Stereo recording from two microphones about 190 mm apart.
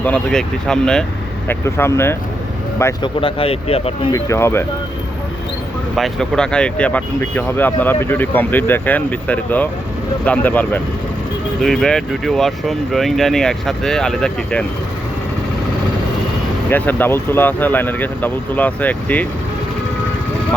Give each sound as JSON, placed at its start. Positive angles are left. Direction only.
{"t": 0.0, "sound": "speech", "side_deg": 5}
{"t": 3.2, "sound": "speech", "side_deg": 30}
{"t": 4.1, "sound": "speech", "side_deg": 15}
{"t": 6.0, "sound": "speech", "side_deg": 5}
{"t": 16.6, "sound": "speech", "side_deg": 10}